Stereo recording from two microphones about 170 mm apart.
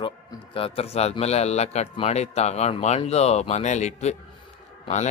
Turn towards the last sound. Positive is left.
turn(degrees=45)  # may be behind; listen again after turning